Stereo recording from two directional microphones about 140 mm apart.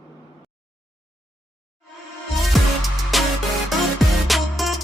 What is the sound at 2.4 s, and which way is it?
Music, centre (ahead or behind).